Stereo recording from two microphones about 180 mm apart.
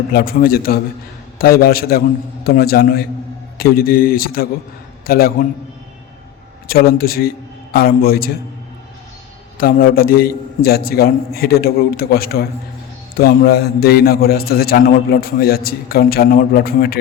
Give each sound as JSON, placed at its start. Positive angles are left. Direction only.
{"t": 0.1, "sound": "a man's voice", "side_deg": 55}
{"t": 6.7, "sound": "a man's voice", "side_deg": 55}
{"t": 9.6, "sound": "a man's voice", "side_deg": 55}